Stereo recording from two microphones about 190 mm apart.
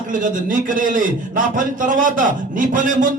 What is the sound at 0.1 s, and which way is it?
Mantra, 45° right (ahead or behind).